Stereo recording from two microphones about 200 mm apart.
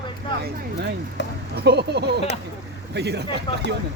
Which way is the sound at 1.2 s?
65° left (ahead or behind).